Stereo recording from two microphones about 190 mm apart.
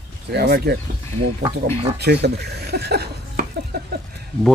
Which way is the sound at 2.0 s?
60° right (ahead or behind).